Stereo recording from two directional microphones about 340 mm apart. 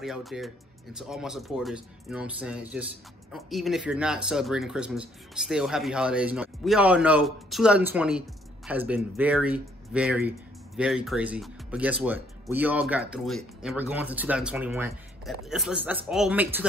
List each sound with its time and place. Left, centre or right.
0.0 s speech: centre